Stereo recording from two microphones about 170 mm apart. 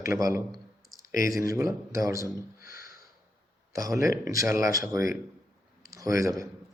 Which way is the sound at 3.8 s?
20° right (ahead or behind).